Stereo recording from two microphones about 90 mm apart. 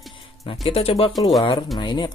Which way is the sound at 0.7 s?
90° left.